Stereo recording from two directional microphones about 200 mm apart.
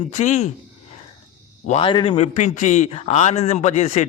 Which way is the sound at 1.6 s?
25° left (ahead or behind).